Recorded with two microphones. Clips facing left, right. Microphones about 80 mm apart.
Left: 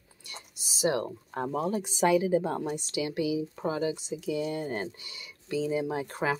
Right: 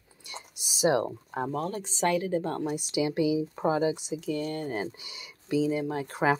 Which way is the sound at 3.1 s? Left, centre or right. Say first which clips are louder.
Right 3 dB; right.